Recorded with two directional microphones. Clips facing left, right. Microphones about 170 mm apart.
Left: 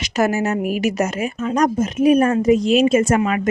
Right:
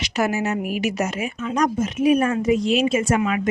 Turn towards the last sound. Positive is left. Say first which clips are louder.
# left 3 dB
turn(degrees=45)  # may be behind; listen again after turning